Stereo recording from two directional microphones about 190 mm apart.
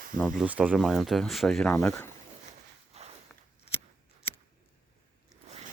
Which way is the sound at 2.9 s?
35° right (ahead or behind).